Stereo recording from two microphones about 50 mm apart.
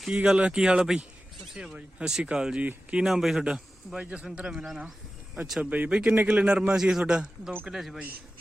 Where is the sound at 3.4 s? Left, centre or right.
Centre.